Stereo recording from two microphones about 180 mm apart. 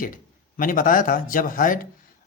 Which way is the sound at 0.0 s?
50° left (ahead or behind).